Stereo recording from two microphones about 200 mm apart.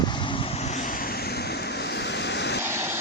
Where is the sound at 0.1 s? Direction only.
25° left (ahead or behind); by 2.6 s 60° left (ahead or behind).